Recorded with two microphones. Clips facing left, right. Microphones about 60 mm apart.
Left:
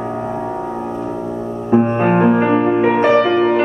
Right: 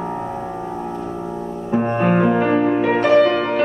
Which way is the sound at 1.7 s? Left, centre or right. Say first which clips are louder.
Left 4 dB; left.